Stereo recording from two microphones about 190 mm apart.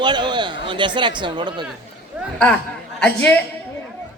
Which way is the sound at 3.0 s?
5° left (ahead or behind).